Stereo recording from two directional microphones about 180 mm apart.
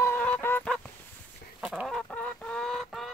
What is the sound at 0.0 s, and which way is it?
Fowl, 10° left (ahead or behind).